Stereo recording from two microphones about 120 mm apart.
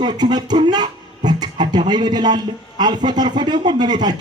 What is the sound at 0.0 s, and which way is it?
A man's voice, 35° right (ahead or behind).